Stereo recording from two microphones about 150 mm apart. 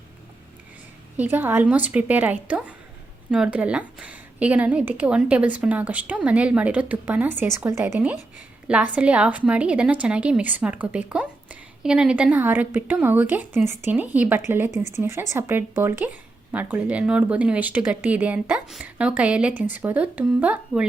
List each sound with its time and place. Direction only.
1.1 s a woman's voice: 10° right (ahead or behind)
14.7 s speech: 50° left (ahead or behind)
15.0 s a woman's voice: 15° right (ahead or behind)